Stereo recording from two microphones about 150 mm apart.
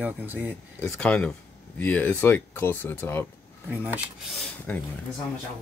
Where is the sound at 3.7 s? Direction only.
10° right (ahead or behind).